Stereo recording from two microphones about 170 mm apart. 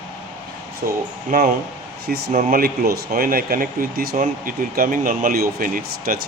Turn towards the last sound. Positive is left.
turn(degrees=-60)  # may be behind; listen again after turning